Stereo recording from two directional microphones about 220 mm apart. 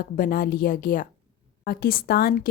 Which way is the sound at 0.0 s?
40° left (ahead or behind).